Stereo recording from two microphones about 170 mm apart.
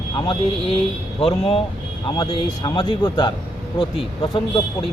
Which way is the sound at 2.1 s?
25° left (ahead or behind).